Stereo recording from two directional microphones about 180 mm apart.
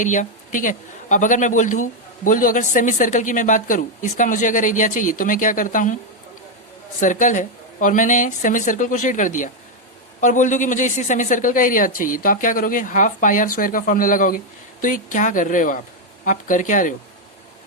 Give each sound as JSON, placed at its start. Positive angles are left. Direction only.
{"t": 0.0, "sound": "speech", "side_deg": 45}
{"t": 7.0, "sound": "speech", "side_deg": 45}